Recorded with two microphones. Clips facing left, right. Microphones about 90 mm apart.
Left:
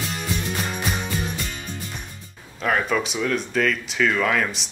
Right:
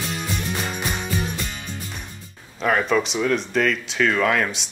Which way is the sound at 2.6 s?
Centre (ahead or behind).